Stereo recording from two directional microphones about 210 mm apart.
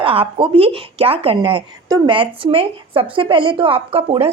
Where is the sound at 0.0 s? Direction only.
25° right (ahead or behind).